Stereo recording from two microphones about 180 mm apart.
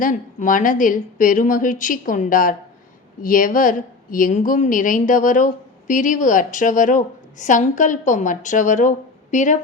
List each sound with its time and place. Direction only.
0.0 s a woman's voice: 45° left (ahead or behind)